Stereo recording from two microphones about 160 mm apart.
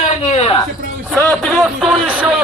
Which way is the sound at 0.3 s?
40° left (ahead or behind).